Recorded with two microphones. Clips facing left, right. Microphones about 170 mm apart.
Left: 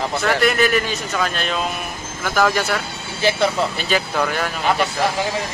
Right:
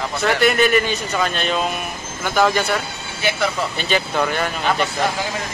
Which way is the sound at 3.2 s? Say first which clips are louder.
Left 3 dB; 30° left (ahead or behind).